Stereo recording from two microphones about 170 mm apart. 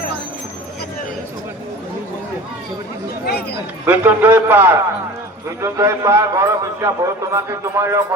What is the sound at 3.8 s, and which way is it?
A man's voice, 10° right (ahead or behind).